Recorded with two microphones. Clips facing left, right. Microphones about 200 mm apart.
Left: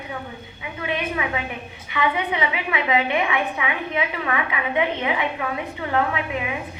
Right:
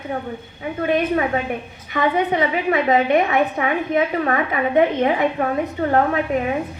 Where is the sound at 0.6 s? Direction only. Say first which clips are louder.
Right 8 dB; 45° right (ahead or behind).